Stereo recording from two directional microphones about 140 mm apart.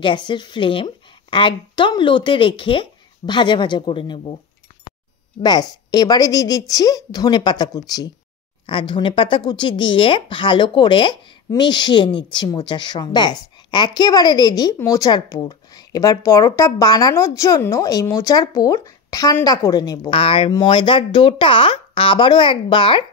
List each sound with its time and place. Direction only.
0.0 s speech: 35° left (ahead or behind)
5.4 s speech: 30° left (ahead or behind)
20.2 s speech: 40° left (ahead or behind)